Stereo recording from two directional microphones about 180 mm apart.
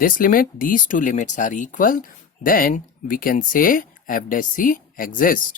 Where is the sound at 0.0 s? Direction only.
50° left (ahead or behind).